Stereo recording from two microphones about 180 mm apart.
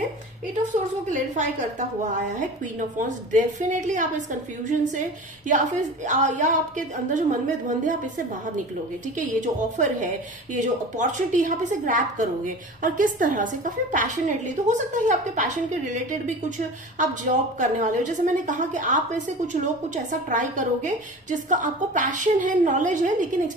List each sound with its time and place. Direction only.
0.7 s a woman's voice: 45° right (ahead or behind)
2.7 s a woman's voice: 45° right (ahead or behind)
17.6 s a woman's voice: 45° right (ahead or behind)